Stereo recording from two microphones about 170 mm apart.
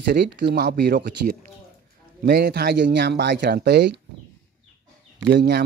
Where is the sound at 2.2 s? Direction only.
65° right (ahead or behind).